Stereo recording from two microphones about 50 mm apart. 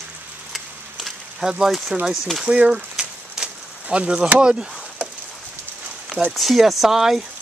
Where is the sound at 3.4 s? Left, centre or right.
Centre.